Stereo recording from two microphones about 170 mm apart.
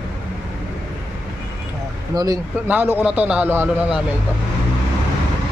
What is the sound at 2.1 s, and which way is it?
Speech, 20° right (ahead or behind).